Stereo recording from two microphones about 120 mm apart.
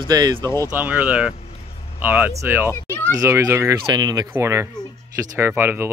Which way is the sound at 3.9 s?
35° right (ahead or behind).